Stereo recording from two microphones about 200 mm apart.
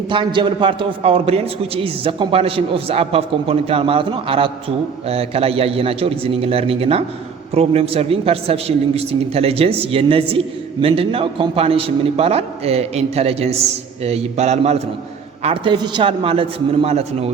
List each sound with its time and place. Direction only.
0.1 s a man's voice: 25° right (ahead or behind)